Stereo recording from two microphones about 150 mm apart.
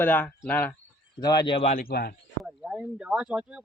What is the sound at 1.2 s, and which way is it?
Speech, 25° left (ahead or behind).